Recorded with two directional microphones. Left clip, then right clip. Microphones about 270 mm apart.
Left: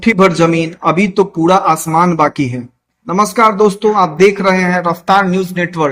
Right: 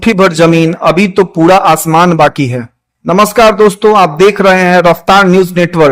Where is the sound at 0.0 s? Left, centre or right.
Right.